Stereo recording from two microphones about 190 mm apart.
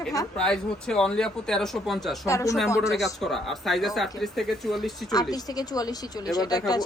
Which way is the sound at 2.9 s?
Centre (ahead or behind).